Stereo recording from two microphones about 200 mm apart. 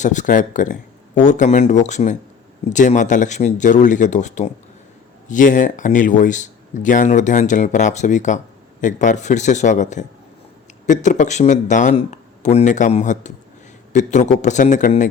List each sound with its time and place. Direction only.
0.0 s speech: 40° left (ahead or behind)